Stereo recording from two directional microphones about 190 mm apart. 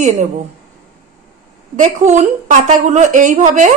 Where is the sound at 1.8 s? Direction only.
40° right (ahead or behind).